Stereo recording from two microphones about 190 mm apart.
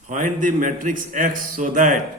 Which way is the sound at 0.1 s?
40° right (ahead or behind).